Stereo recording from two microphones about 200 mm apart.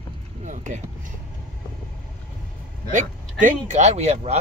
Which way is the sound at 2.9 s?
40° right (ahead or behind).